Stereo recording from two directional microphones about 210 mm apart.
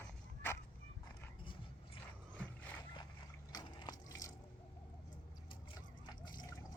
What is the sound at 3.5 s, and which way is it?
Water, 20° left (ahead or behind).